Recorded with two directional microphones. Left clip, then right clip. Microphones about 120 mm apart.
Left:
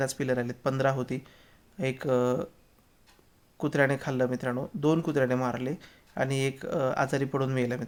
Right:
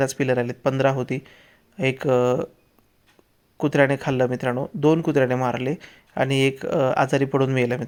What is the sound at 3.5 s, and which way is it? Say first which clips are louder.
Speech: right 7 dB; 30° right (ahead or behind).